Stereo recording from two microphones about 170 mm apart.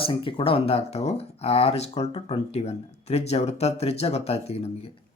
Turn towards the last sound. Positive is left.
turn(degrees=35)  # may be behind; listen again after turning